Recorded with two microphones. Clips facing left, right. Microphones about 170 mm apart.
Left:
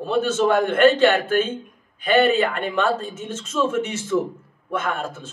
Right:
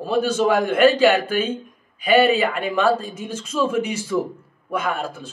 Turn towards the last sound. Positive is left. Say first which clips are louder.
# right 1 dB
turn(degrees=-10)  # may be behind; listen again after turning